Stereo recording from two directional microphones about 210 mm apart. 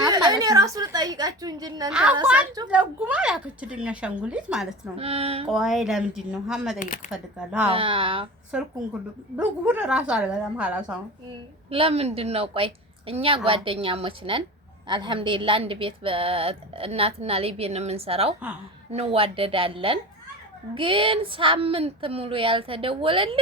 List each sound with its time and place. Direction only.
0.0 s a woman's voice: 20° right (ahead or behind)
1.9 s a woman's voice: 5° right (ahead or behind)
4.9 s a woman's voice: 30° right (ahead or behind)
5.5 s a woman's voice: centre (ahead or behind)
6.7 s speech: 40° left (ahead or behind)
7.1 s a woman's voice: 5° right (ahead or behind)
7.7 s a woman's voice: 25° right (ahead or behind)
8.5 s a woman's voice: 5° right (ahead or behind)
11.7 s a woman's voice: 25° right (ahead or behind)